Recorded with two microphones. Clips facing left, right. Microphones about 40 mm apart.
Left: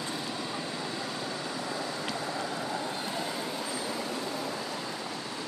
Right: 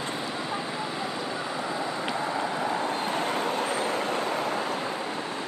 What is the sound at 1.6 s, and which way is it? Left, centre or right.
Vehicle, right.